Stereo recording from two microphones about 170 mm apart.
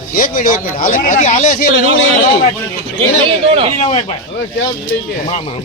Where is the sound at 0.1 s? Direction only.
55° left (ahead or behind).